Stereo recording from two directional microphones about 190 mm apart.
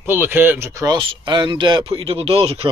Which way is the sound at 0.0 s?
10° right (ahead or behind).